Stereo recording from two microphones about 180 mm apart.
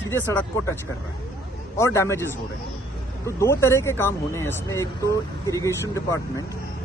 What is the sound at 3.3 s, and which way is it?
Speech, 15° left (ahead or behind).